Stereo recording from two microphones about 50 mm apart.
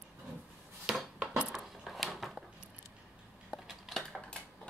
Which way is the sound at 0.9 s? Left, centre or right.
Centre.